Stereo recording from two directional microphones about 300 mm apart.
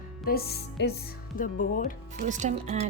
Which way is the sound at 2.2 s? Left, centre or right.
Right.